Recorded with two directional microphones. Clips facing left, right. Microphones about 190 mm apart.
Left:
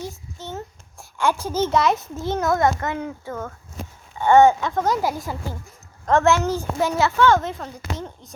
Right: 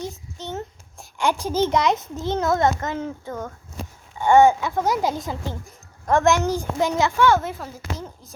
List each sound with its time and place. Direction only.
0.3 s a child's voice: 20° right (ahead or behind); by 8.3 s centre (ahead or behind)